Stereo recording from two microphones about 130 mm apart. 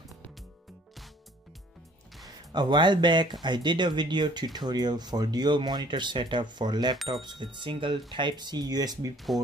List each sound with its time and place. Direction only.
2.2 s speech: 35° right (ahead or behind)
9.1 s speech: centre (ahead or behind)